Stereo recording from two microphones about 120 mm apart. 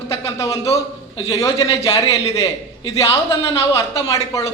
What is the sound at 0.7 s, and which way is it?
Speech, 60° left (ahead or behind).